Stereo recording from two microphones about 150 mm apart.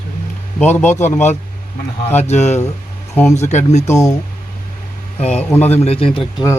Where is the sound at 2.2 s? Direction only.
50° left (ahead or behind).